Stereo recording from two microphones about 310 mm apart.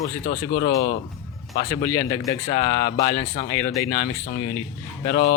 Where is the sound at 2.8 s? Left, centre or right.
Left.